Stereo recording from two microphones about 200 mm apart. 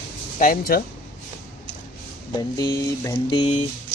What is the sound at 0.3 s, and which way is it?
Speech, 45° left (ahead or behind).